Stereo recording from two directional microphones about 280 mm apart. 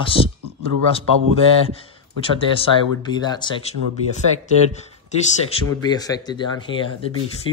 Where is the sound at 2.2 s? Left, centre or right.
Centre.